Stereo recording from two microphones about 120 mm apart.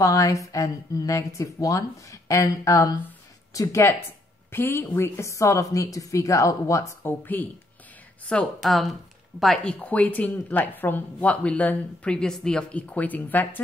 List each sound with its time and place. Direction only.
0.0 s a woman's voice: 30° left (ahead or behind)
8.5 s speech: centre (ahead or behind)
9.8 s speech: 10° left (ahead or behind)